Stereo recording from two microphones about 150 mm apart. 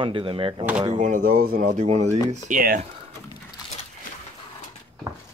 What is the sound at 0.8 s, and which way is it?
Speech, 55° right (ahead or behind).